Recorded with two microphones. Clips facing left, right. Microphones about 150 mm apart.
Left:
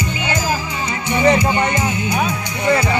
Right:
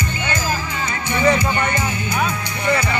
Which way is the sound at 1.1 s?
20° left (ahead or behind).